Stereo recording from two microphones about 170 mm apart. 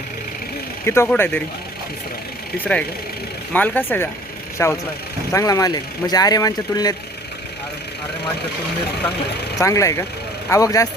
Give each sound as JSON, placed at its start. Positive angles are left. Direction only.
{"t": 0.9, "sound": "speech", "side_deg": 15}
{"t": 3.5, "sound": "speech", "side_deg": 10}
{"t": 9.6, "sound": "speech", "side_deg": 20}